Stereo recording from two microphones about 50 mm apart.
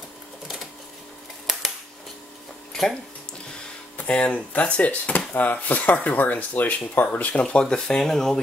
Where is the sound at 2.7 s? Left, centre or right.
Centre.